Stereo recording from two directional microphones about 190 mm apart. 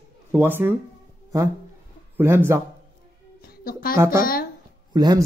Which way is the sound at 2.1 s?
10° right (ahead or behind).